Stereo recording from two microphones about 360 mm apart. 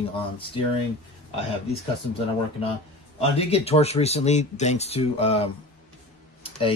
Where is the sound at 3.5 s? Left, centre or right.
Centre.